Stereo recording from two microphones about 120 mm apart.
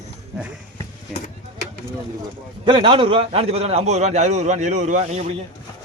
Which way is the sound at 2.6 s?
45° right (ahead or behind).